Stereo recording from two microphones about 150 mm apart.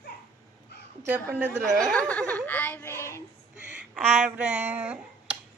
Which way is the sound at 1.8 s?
5° left (ahead or behind).